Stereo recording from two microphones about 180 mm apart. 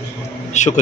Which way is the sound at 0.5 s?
40° left (ahead or behind).